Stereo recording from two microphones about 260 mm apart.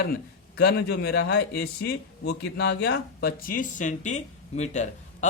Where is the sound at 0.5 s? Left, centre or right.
Left.